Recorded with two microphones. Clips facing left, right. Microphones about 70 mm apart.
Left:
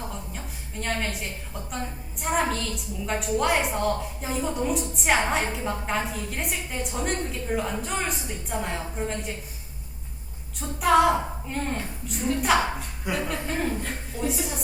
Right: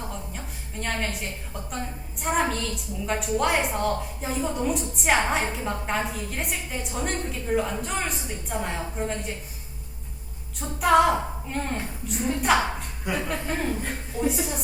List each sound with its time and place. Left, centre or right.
0.0 s a sound: centre
2.2 s a woman's voice: centre
10.6 s a woman's voice: centre